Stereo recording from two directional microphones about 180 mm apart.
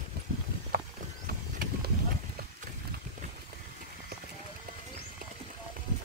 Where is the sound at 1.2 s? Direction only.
50° right (ahead or behind).